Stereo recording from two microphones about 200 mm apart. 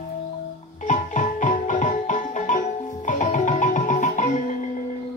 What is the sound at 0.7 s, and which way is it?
Music, 40° left (ahead or behind).